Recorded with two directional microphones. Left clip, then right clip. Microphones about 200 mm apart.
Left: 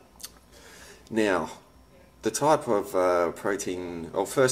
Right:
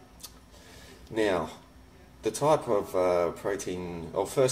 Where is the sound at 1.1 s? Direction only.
5° left (ahead or behind).